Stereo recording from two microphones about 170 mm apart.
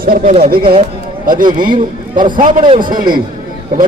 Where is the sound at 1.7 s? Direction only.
25° right (ahead or behind).